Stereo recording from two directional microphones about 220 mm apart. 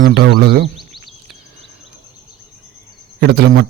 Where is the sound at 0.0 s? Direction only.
50° right (ahead or behind).